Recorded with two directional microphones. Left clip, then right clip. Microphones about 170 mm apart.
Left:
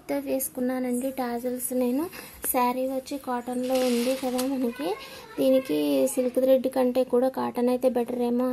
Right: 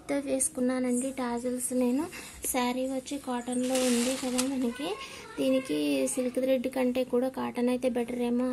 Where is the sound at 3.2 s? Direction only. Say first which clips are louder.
Left 4 dB; 50° left (ahead or behind).